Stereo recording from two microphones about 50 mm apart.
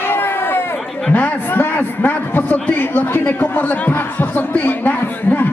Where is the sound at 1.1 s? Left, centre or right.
Left.